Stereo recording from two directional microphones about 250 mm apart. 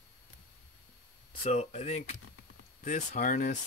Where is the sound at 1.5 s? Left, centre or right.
Left.